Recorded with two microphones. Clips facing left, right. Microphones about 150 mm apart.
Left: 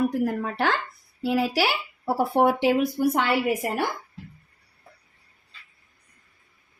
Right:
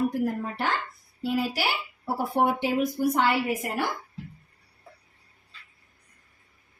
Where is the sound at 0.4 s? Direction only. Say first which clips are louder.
Left 4 dB; 85° left.